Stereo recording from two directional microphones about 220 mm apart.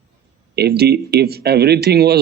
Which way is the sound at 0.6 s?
45° right (ahead or behind).